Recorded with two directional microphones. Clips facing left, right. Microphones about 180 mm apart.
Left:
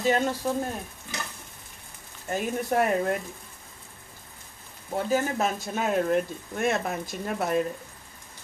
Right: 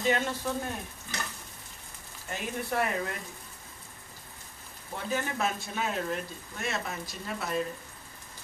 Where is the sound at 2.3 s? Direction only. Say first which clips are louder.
Left 6 dB; 45° left (ahead or behind).